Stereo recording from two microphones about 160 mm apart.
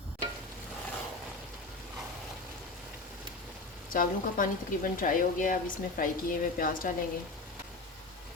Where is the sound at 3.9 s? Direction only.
60° left (ahead or behind).